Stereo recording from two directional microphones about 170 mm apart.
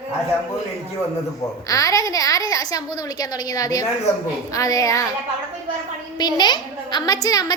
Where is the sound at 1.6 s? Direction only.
20° left (ahead or behind).